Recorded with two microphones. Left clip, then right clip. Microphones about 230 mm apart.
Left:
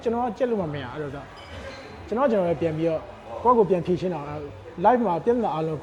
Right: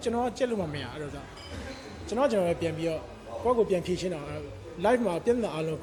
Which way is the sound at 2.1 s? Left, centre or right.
Centre.